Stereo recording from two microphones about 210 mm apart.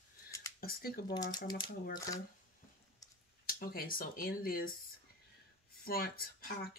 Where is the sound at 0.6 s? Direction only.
45° left (ahead or behind).